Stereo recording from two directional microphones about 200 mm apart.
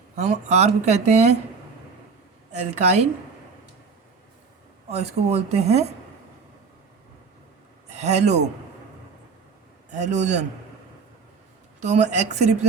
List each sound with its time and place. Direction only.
0.2 s speech: 35° right (ahead or behind)
2.5 s speech: 35° right (ahead or behind)
4.9 s speech: 30° right (ahead or behind)
7.9 s a man's voice: 35° right (ahead or behind)
10.0 s speech: 35° right (ahead or behind)
11.8 s speech: 35° right (ahead or behind)